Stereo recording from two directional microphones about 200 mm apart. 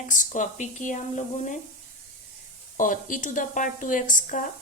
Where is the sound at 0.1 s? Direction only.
40° left (ahead or behind).